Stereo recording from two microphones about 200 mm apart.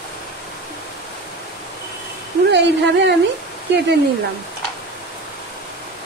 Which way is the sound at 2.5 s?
60° right (ahead or behind).